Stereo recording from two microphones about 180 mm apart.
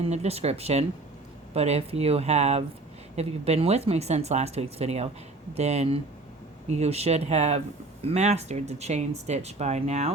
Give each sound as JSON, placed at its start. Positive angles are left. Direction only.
{"t": 0.0, "sound": "speech", "side_deg": -35}